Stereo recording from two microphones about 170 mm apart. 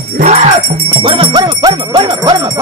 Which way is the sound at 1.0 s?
30° right (ahead or behind).